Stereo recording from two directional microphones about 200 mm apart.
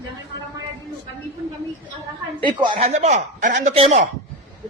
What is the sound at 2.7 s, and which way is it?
Speech, 40° right (ahead or behind).